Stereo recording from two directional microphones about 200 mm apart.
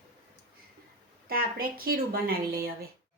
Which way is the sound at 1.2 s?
50° right (ahead or behind).